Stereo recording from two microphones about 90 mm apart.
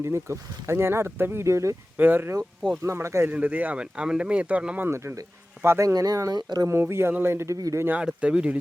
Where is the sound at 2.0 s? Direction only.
20° right (ahead or behind).